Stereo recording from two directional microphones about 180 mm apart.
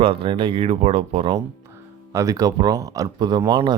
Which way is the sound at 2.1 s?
20° right (ahead or behind).